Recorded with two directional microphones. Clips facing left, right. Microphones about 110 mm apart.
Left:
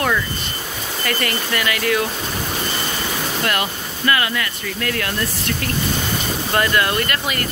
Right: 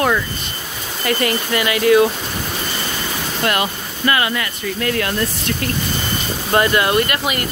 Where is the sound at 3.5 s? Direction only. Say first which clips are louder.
Right 2 dB; 20° right (ahead or behind).